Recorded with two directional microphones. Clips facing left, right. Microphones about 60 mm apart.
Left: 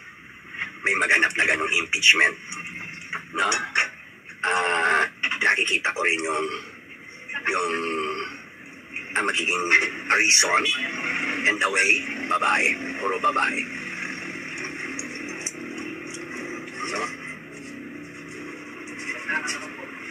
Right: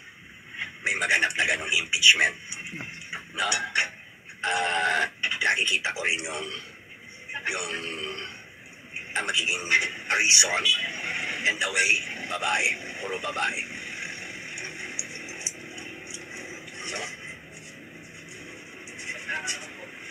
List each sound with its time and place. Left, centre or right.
0.6 s a man's voice: left
8.9 s a sound: left
18.4 s vehicle: left